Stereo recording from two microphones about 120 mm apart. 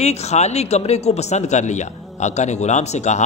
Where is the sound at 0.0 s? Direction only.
65° left (ahead or behind).